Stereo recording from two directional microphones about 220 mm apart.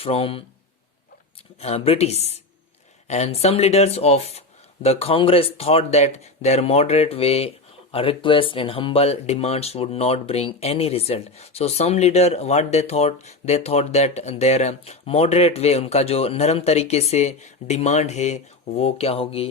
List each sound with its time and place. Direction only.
0.0 s speech: 25° left (ahead or behind)
1.6 s speech: 25° left (ahead or behind)